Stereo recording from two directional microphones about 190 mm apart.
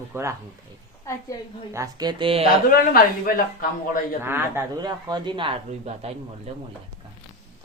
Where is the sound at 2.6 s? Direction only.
50° left (ahead or behind).